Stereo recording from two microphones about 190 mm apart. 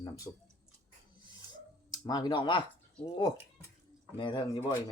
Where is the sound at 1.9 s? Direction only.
20° left (ahead or behind).